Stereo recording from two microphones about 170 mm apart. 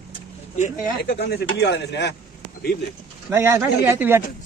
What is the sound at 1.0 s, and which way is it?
Speech, 75° left (ahead or behind).